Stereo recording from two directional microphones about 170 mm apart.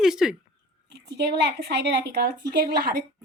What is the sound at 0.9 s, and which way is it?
A woman's voice, 85° right.